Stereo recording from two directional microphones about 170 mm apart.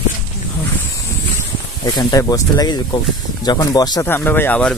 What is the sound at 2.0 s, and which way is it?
Speech, 25° left (ahead or behind).